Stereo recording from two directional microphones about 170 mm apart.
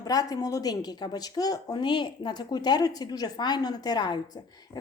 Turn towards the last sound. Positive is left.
turn(degrees=25)  # may be behind; listen again after turning